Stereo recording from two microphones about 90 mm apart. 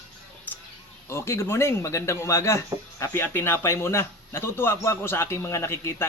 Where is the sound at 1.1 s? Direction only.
30° left (ahead or behind).